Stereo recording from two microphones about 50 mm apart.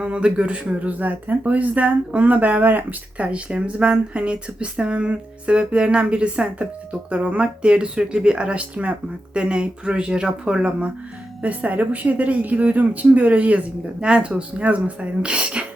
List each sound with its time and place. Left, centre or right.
0.0 s speech: right
0.9 s speech: right